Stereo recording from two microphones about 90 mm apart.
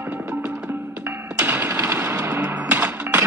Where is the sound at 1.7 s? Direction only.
35° right (ahead or behind).